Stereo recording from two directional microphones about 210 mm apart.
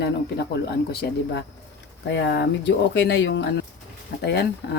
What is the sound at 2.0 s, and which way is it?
Speech, 55° left (ahead or behind).